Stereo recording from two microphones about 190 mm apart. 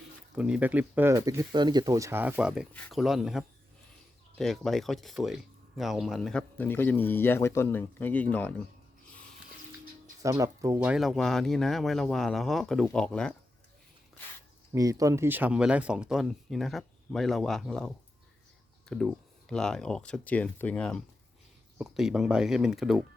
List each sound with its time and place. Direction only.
0.3 s speech: 5° right (ahead or behind)
10.2 s speech: 15° right (ahead or behind)
10.9 s speech: centre (ahead or behind)
14.7 s speech: 20° right (ahead or behind); by 23.0 s centre (ahead or behind)